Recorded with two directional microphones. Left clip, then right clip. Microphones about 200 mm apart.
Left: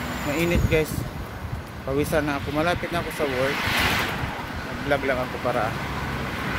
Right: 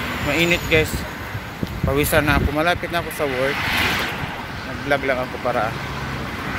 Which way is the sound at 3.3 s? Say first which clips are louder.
Right 3 dB; 55° left (ahead or behind).